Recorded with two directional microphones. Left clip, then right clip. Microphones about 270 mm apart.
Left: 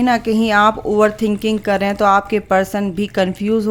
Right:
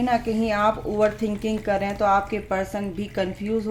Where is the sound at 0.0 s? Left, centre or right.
Left.